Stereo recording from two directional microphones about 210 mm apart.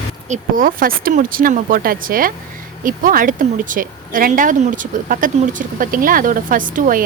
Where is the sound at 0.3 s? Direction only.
40° right (ahead or behind).